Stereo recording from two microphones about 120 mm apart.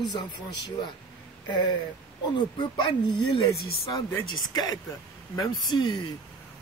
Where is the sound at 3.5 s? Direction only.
30° left (ahead or behind).